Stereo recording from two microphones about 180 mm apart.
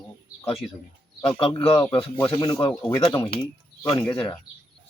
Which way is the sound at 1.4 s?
30° left (ahead or behind).